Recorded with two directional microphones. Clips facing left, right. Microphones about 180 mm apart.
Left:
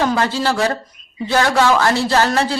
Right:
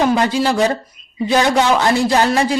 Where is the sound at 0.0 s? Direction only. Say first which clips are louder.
Right 3 dB; 15° right (ahead or behind).